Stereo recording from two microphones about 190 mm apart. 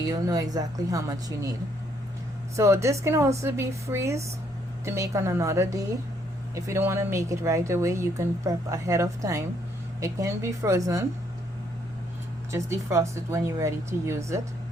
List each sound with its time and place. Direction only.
0.0 s speech: 20° right (ahead or behind)
2.6 s speech: 15° right (ahead or behind)
12.5 s speech: 15° right (ahead or behind)